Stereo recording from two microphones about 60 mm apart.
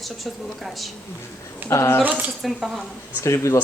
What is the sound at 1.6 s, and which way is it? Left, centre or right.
Speech, left.